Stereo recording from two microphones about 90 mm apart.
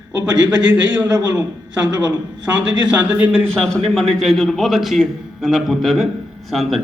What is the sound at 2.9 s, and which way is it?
Speech, 15° right (ahead or behind).